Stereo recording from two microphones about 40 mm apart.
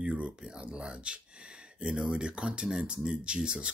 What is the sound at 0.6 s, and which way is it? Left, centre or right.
Speech, right.